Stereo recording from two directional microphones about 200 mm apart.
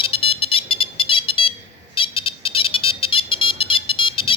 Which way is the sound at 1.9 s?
25° left (ahead or behind).